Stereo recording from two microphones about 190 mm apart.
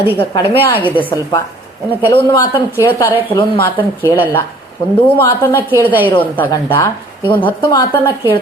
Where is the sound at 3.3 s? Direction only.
15° left (ahead or behind).